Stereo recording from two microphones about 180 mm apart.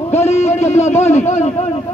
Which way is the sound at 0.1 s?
35° left (ahead or behind).